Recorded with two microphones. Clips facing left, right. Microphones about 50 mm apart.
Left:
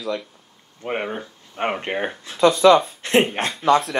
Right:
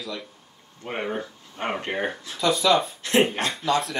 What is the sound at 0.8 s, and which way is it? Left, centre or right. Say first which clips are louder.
Speech: left 3 dB; centre.